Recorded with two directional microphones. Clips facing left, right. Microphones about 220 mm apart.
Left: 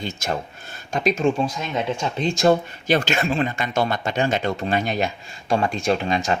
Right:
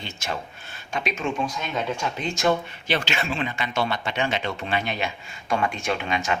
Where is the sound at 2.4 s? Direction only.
40° left (ahead or behind).